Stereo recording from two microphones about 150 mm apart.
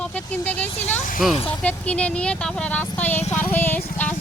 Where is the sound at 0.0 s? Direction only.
10° left (ahead or behind).